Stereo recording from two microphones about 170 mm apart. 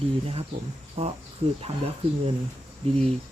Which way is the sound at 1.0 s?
35° right (ahead or behind).